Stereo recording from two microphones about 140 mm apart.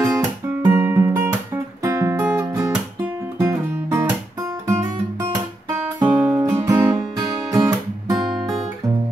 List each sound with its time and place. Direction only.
0.0 s guitar: 25° right (ahead or behind)
0.7 s music: 15° right (ahead or behind)
5.3 s guitar: 25° right (ahead or behind)
5.9 s music: 15° right (ahead or behind)